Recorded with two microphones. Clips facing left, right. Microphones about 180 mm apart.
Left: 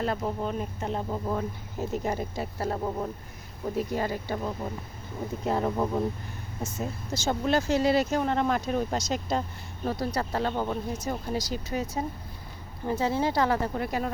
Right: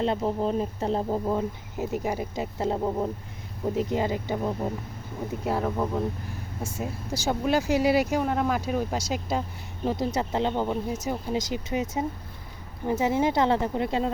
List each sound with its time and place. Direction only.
0.0 s speech: 25° right (ahead or behind)
1.3 s speech: 15° right (ahead or behind)
5.6 s speech: 5° left (ahead or behind)
6.6 s speech: 10° right (ahead or behind)